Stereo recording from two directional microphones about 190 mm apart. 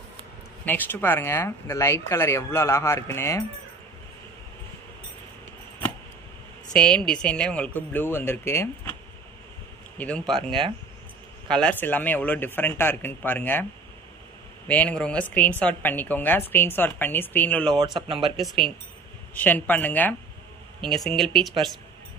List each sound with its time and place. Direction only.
0.7 s a woman's voice: 10° left (ahead or behind)
6.7 s a woman's voice: 5° left (ahead or behind)
9.9 s speech: 5° left (ahead or behind)
11.5 s a woman's voice: 5° left (ahead or behind)
14.7 s a woman's voice: 10° left (ahead or behind)
17.7 s speech: 25° right (ahead or behind)
18.3 s a woman's voice: centre (ahead or behind)